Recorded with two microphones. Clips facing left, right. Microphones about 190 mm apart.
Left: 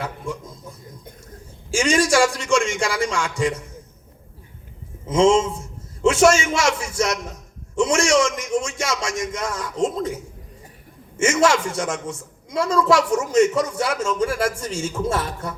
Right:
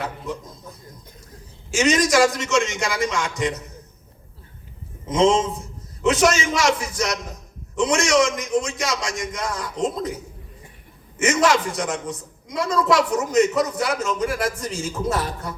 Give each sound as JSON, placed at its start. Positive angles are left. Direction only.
{"t": 1.7, "sound": "a man's voice", "side_deg": 30}
{"t": 5.0, "sound": "a man's voice", "side_deg": 30}
{"t": 9.0, "sound": "speech", "side_deg": -30}
{"t": 9.8, "sound": "a man's voice", "side_deg": 25}
{"t": 11.2, "sound": "a man's voice", "side_deg": 30}